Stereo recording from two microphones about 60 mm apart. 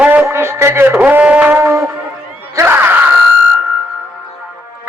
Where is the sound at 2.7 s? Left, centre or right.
Right.